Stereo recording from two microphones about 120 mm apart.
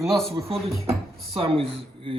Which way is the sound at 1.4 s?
50° right (ahead or behind).